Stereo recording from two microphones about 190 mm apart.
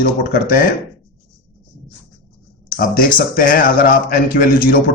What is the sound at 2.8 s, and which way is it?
A man's voice, 50° left (ahead or behind).